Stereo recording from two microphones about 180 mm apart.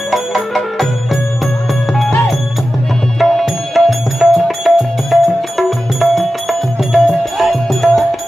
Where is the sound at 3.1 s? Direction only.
Centre (ahead or behind).